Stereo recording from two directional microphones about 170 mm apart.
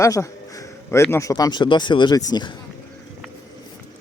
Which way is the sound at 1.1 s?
20° left (ahead or behind).